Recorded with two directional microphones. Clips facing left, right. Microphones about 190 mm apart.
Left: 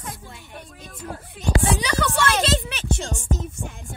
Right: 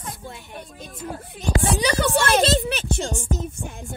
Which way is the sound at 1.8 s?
35° right (ahead or behind).